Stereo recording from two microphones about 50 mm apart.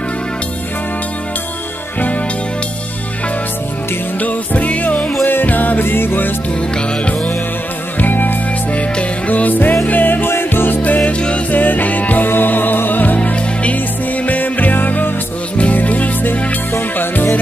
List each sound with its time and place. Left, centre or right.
4.2 s music: left
5.2 s music: left
8.0 s music: left
11.1 s music: left
11.5 s music: left